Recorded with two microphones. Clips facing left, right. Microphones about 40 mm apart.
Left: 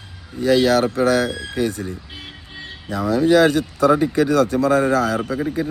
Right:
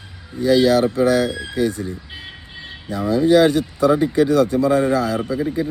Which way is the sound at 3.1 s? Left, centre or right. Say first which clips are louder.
Right 1 dB; left.